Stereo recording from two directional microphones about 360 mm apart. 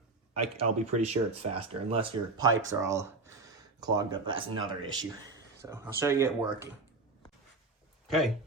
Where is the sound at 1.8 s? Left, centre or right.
Centre.